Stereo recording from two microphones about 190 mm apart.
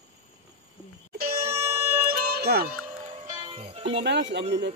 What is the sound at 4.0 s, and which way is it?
Speech, 65° right (ahead or behind).